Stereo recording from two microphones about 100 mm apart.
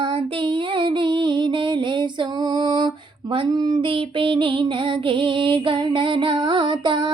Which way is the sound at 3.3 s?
50° right (ahead or behind).